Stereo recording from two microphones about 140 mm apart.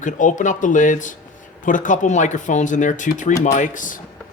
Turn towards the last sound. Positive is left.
turn(degrees=70)  # may be behind; listen again after turning